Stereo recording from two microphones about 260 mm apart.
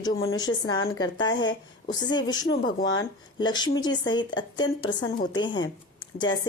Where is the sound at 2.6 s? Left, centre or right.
Left.